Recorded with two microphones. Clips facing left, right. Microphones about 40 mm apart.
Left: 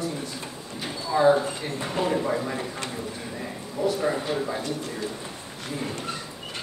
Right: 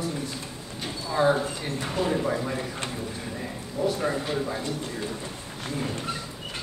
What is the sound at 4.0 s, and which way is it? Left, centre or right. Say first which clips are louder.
Speech: left 1 dB; centre.